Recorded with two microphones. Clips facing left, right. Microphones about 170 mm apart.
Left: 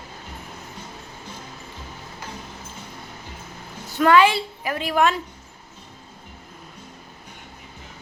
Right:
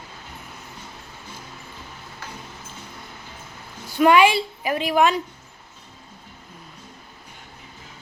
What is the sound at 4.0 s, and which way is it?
Speech, 15° right (ahead or behind).